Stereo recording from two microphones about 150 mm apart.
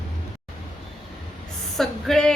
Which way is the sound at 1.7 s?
5° left (ahead or behind).